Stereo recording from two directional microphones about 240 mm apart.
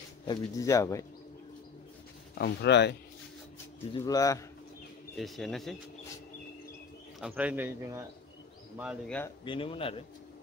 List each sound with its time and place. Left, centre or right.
0.3 s speech: centre
2.3 s speech: left
3.9 s speech: centre
5.1 s speech: centre
7.2 s speech: centre
9.4 s speech: left